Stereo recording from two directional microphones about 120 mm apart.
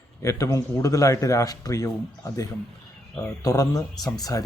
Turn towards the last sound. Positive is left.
turn(degrees=30)  # may be behind; listen again after turning